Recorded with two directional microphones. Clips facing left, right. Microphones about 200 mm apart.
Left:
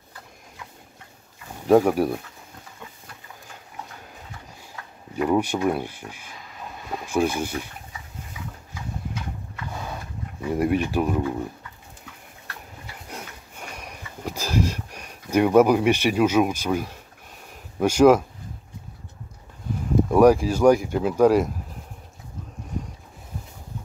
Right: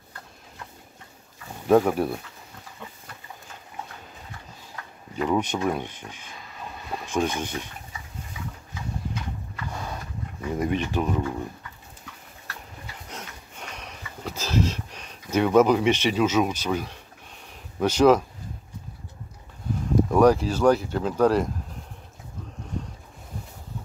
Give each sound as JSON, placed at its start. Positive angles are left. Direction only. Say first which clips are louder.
{"t": 1.7, "sound": "speech", "louder": "left 2 dB", "side_deg": 10}
{"t": 5.1, "sound": "speech", "louder": "left 3 dB", "side_deg": 10}
{"t": 10.4, "sound": "speech", "louder": "left 4 dB", "side_deg": 10}
{"t": 13.1, "sound": "sniff", "louder": "left 3 dB", "side_deg": 10}
{"t": 17.7, "sound": "speech", "louder": "left 2 dB", "side_deg": 10}
{"t": 20.1, "sound": "speech", "louder": "left 3 dB", "side_deg": 10}